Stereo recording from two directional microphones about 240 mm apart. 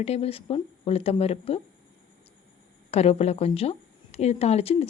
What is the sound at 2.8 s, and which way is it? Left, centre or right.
Speech, left.